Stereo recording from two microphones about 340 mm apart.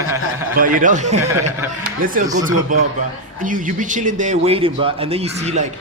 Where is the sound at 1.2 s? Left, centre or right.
Centre.